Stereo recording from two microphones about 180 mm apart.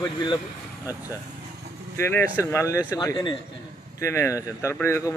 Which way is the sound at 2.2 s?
10° right (ahead or behind).